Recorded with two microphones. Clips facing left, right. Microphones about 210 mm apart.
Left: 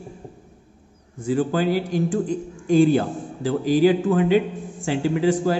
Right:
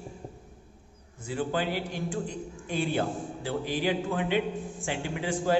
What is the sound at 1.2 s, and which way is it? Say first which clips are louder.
A man's voice: left 9 dB; 45° left (ahead or behind).